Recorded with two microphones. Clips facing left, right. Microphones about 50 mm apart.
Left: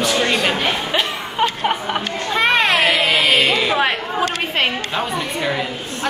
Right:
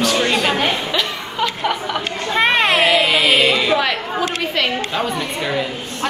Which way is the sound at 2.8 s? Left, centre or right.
Centre.